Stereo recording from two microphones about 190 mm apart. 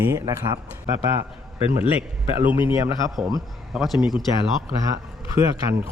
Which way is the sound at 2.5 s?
15° right (ahead or behind).